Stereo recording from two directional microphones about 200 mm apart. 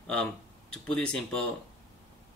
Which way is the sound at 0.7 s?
5° left (ahead or behind).